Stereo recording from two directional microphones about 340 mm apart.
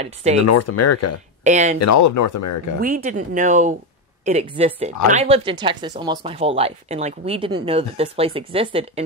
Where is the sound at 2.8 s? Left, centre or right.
Right.